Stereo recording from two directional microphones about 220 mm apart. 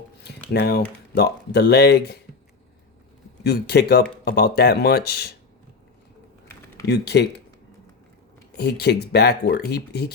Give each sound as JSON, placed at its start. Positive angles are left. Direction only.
{"t": 0.5, "sound": "speech", "side_deg": 45}
{"t": 3.4, "sound": "speech", "side_deg": 45}
{"t": 6.8, "sound": "speech", "side_deg": 50}
{"t": 8.5, "sound": "speech", "side_deg": 50}